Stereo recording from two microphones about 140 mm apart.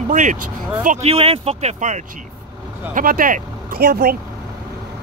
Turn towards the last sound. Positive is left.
turn(degrees=-90)